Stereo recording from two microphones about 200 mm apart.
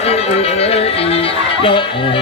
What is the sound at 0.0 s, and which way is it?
Music, 30° left (ahead or behind).